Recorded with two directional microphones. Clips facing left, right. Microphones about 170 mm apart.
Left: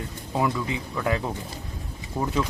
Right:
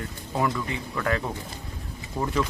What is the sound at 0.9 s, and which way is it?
Speech, 15° left (ahead or behind).